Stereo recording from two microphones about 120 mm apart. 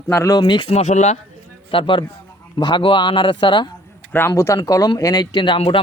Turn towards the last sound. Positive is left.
turn(degrees=45)  # may be behind; listen again after turning